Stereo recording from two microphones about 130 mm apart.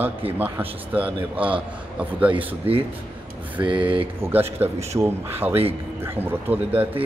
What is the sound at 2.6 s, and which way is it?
Speech, 15° right (ahead or behind).